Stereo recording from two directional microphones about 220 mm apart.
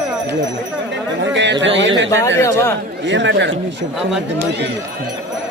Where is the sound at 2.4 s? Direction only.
10° left (ahead or behind).